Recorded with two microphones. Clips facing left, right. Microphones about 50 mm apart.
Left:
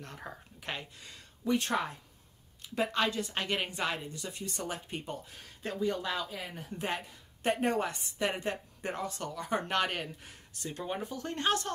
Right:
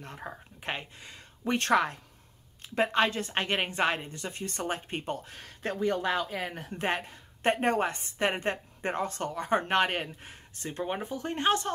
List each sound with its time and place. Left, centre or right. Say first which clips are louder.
0.0 s a sound: right 3 dB; right
0.6 s speech: right 4 dB; right
1.4 s speech: right 1 dB; right
1.7 s a woman's voice: right 7 dB; right
2.6 s a woman's voice: right 4 dB; right